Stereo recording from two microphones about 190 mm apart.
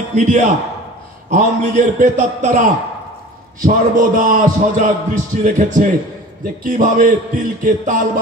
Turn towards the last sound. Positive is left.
turn(degrees=-45)  # may be behind; listen again after turning